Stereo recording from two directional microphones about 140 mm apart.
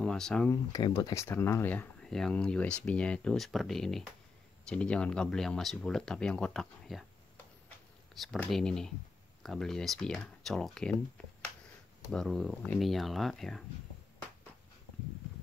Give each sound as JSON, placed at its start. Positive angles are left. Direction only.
{"t": 0.0, "sound": "speech", "side_deg": 5}
{"t": 0.8, "sound": "speech", "side_deg": 35}
{"t": 1.1, "sound": "speech", "side_deg": 20}
{"t": 8.1, "sound": "speech", "side_deg": 0}
{"t": 12.1, "sound": "speech", "side_deg": 5}